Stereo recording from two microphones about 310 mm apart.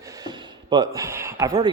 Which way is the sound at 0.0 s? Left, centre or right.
Centre.